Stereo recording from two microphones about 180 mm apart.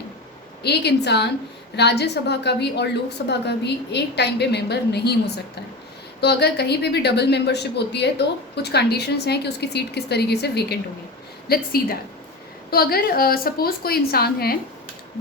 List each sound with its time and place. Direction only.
0.6 s a woman's voice: 65° left (ahead or behind)
6.1 s a woman's voice: 65° left (ahead or behind)